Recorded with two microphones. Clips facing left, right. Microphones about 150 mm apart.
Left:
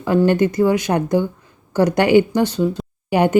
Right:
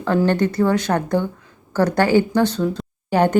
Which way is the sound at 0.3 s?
10° left (ahead or behind).